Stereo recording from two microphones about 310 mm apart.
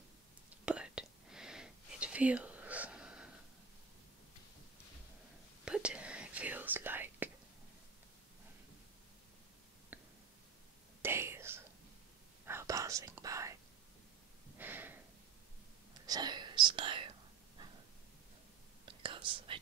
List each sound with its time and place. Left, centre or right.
0.7 s whispering: centre
5.7 s whispering: centre
9.9 s a sound: centre
11.0 s whispering: centre
14.6 s a sound: centre
16.1 s whispering: centre
18.9 s whispering: centre